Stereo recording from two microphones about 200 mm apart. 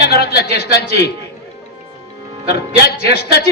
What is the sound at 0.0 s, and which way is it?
A man's voice, 50° left (ahead or behind).